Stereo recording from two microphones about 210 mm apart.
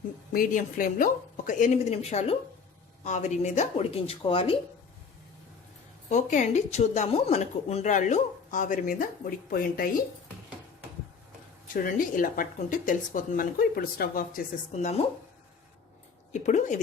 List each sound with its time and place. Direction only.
0.3 s speech: 40° left (ahead or behind)
6.1 s speech: 35° left (ahead or behind)
11.7 s speech: 40° left (ahead or behind)
16.3 s speech: 35° left (ahead or behind)